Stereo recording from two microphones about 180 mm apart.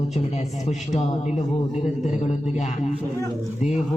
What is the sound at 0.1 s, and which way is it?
A man's voice, 40° left (ahead or behind).